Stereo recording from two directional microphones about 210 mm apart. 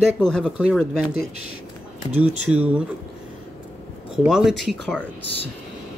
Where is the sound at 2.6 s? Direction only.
5° right (ahead or behind).